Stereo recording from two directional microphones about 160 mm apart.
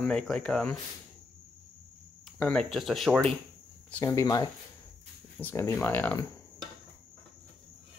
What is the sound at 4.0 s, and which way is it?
Speech, 20° left (ahead or behind).